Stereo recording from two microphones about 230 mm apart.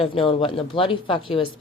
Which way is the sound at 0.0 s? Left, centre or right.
Left.